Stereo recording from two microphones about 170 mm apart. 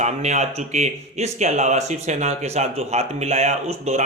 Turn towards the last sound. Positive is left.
turn(degrees=-40)  # may be behind; listen again after turning